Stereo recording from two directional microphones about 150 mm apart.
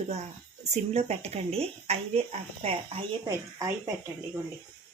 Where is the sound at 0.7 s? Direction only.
45° right (ahead or behind).